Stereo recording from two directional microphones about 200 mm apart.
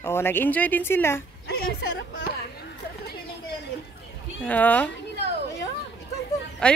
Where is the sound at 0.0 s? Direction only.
10° left (ahead or behind).